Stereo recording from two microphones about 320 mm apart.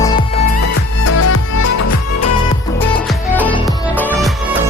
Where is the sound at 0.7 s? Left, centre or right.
Left.